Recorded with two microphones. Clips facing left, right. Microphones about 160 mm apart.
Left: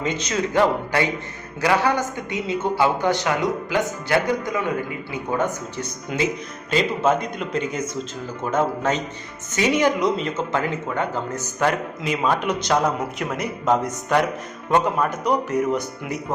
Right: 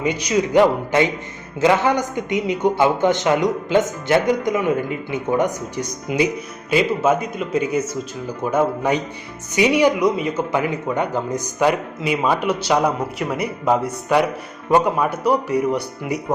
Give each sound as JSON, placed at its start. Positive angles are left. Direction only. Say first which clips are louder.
{"t": 0.0, "sound": "a man's voice", "louder": "right 4 dB", "side_deg": -10}